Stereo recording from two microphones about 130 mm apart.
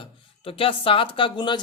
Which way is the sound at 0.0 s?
45° left (ahead or behind).